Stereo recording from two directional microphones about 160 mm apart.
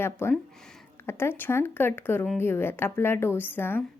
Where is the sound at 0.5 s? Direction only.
5° left (ahead or behind).